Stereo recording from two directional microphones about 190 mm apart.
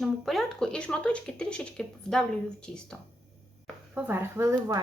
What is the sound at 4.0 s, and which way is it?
Speech, 10° right (ahead or behind).